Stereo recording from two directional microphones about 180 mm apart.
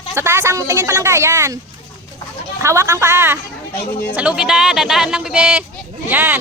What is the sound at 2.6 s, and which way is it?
Speech, 15° right (ahead or behind).